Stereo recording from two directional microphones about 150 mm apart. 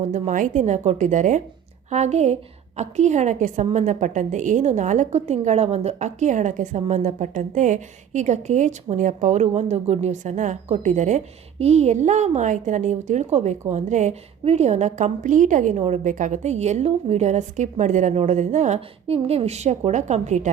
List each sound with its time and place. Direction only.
0.0 s a woman's voice: 55° right (ahead or behind)